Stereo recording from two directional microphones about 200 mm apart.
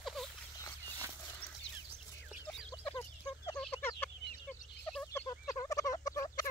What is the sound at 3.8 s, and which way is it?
Chicken, 10° left (ahead or behind).